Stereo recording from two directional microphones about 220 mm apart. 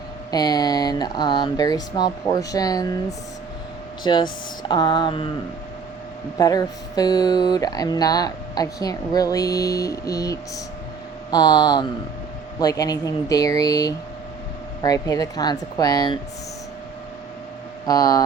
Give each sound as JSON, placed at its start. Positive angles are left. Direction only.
{"t": 0.3, "sound": "speech", "side_deg": 20}
{"t": 4.0, "sound": "mantra", "side_deg": 20}
{"t": 6.3, "sound": "speech", "side_deg": 15}
{"t": 11.3, "sound": "mantra", "side_deg": 20}
{"t": 12.5, "sound": "speech", "side_deg": 15}
{"t": 17.8, "sound": "speech", "side_deg": 15}